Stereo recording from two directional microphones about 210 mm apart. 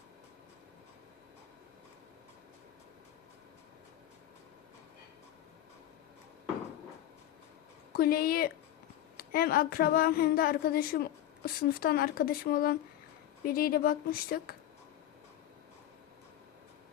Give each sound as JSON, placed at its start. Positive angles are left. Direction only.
{"t": 7.9, "sound": "speech", "side_deg": 45}